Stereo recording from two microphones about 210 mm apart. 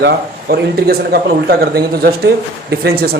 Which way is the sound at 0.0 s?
50° right (ahead or behind).